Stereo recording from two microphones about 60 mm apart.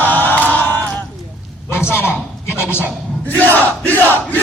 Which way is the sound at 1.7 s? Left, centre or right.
Left.